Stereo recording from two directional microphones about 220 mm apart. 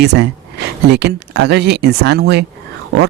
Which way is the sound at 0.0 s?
50° right (ahead or behind).